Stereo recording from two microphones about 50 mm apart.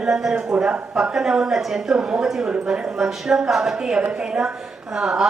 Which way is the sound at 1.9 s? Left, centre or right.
Right.